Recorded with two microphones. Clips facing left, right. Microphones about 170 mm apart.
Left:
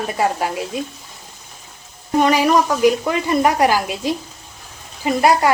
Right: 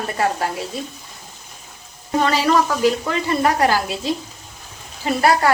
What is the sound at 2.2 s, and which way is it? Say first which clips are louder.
Speech: left 2 dB; 15° left (ahead or behind).